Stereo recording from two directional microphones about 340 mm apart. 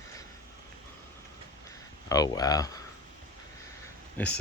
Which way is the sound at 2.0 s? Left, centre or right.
Centre.